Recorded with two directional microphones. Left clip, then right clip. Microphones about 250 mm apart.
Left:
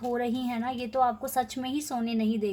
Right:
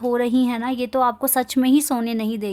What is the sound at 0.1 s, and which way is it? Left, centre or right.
Speech, right.